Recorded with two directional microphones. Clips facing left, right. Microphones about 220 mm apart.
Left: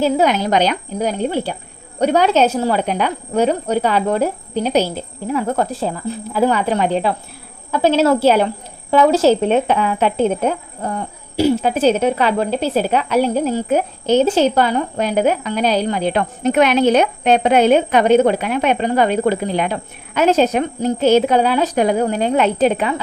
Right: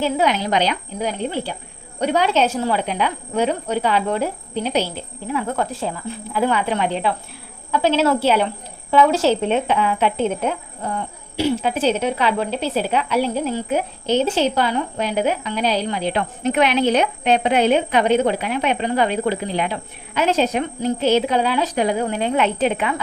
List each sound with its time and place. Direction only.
0.0 s speech: 45° left (ahead or behind)